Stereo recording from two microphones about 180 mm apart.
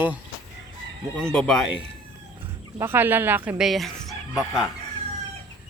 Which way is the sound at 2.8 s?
10° right (ahead or behind).